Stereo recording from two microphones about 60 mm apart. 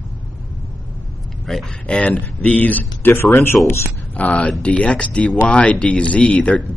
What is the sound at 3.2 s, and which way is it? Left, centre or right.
Speech, left.